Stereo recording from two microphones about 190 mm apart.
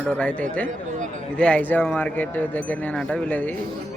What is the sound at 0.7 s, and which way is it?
Speech, 40° right (ahead or behind).